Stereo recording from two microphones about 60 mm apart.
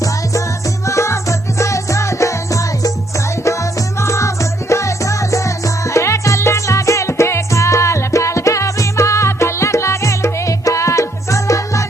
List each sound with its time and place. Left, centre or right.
0.9 s music: left